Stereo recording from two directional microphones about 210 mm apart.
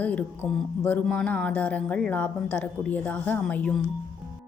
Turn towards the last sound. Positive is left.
turn(degrees=5)  # may be behind; listen again after turning